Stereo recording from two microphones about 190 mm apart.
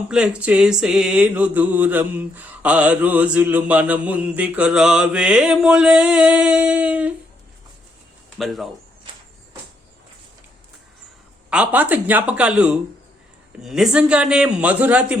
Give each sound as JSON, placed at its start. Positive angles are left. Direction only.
{"t": 0.1, "sound": "mantra", "side_deg": -5}
{"t": 8.4, "sound": "a man's voice", "side_deg": 0}
{"t": 11.5, "sound": "mantra", "side_deg": -5}
{"t": 13.6, "sound": "a man's voice", "side_deg": 0}